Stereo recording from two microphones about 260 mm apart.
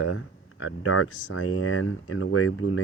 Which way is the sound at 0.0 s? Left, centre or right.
Left.